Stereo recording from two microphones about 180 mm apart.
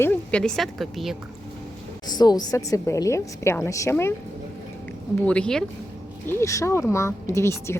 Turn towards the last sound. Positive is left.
turn(degrees=15)  # may be behind; listen again after turning